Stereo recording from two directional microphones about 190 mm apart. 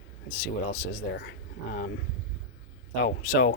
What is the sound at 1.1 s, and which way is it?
Speech, 60° left (ahead or behind).